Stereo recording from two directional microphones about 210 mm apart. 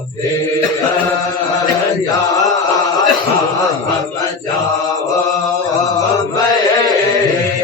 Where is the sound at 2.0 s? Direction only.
15° left (ahead or behind).